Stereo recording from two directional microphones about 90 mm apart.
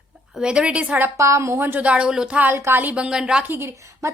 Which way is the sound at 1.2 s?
35° right (ahead or behind).